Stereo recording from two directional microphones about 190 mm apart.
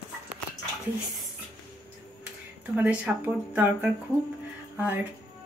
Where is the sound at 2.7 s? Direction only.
10° right (ahead or behind).